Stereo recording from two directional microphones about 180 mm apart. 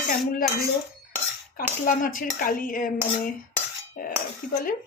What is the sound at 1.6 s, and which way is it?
Speech, 50° left (ahead or behind).